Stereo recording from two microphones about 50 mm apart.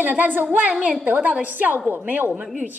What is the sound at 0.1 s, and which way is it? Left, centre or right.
A woman's voice, right.